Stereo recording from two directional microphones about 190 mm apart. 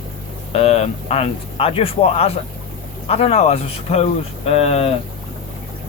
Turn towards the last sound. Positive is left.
turn(degrees=30)  # may be behind; listen again after turning